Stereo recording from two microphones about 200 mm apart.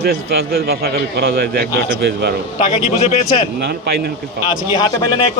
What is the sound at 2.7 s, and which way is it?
Speech, 30° left (ahead or behind).